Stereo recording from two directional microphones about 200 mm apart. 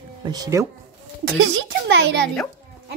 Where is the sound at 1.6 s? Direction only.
60° right (ahead or behind).